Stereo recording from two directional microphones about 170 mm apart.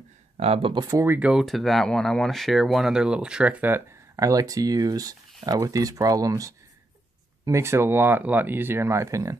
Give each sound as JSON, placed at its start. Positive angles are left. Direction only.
{"t": 0.4, "sound": "speech", "side_deg": -35}
{"t": 0.8, "sound": "speech", "side_deg": -15}